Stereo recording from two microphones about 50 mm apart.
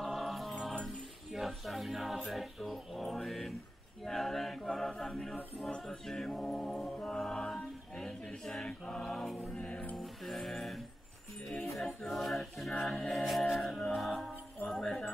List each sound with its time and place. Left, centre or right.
0.0 s music: centre
4.0 s a capella: centre
5.7 s music: centre
9.6 s music: left
9.9 s music: centre
12.1 s a capella: centre
12.8 s music: centre
14.7 s jingle bell: centre